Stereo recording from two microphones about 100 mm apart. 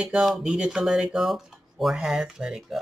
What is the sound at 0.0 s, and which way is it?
Speech, 10° right (ahead or behind).